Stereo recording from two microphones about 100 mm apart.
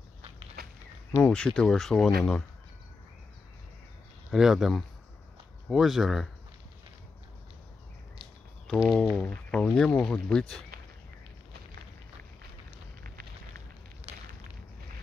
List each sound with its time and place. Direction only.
1.2 s speech: 10° left (ahead or behind)
4.3 s speech: 5° right (ahead or behind)
8.8 s speech: 5° right (ahead or behind)
9.1 s speech: 10° left (ahead or behind)
14.1 s a sound: 90° right